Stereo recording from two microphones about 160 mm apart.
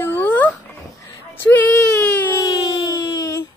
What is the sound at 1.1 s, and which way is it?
Baby cry, 10° left (ahead or behind).